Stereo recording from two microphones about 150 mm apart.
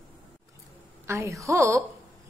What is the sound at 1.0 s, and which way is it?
Speech, 20° right (ahead or behind).